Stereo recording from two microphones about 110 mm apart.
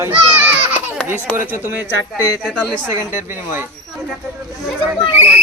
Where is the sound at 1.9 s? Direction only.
30° left (ahead or behind).